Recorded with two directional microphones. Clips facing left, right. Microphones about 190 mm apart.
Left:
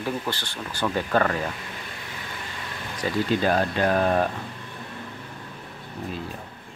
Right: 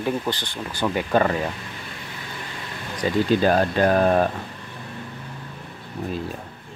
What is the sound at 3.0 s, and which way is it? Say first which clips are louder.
Speech: right 4 dB; 25° right (ahead or behind).